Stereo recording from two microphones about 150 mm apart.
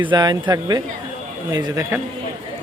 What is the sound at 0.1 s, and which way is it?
A man's voice, 30° right (ahead or behind).